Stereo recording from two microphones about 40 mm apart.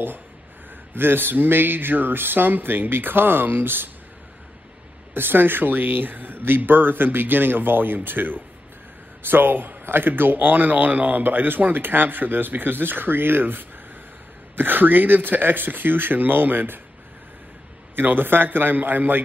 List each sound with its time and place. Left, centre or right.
0.9 s speech: right
5.1 s speech: right
17.9 s speech: right